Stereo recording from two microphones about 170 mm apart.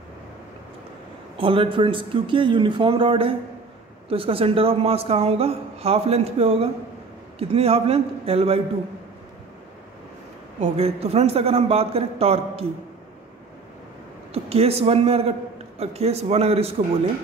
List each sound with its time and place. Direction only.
1.4 s a man's voice: 30° right (ahead or behind)
10.6 s a man's voice: 35° right (ahead or behind)
14.3 s a man's voice: 35° right (ahead or behind)